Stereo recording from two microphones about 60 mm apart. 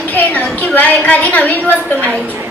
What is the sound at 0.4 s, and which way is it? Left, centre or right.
A woman's voice, left.